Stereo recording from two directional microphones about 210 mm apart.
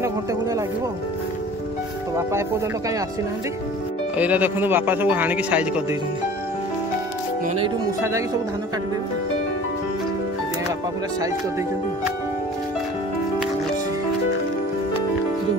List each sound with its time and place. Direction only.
0.0 s speech: 15° right (ahead or behind)
4.2 s a man's voice: 10° right (ahead or behind)
7.4 s speech: 25° right (ahead or behind)